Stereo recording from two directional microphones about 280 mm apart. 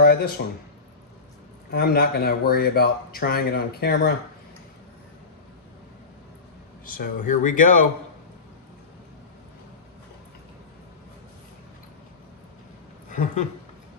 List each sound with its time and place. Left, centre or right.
0.4 s speech: left
1.7 s speech: left
6.8 s speech: left
13.1 s speech: left